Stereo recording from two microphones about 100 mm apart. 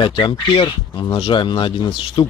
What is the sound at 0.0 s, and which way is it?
Speech, 60° left (ahead or behind).